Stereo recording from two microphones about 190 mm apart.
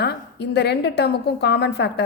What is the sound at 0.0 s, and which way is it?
A woman's voice, 60° left (ahead or behind).